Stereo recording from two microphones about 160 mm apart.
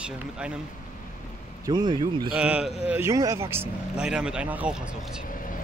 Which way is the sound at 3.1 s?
20° right (ahead or behind).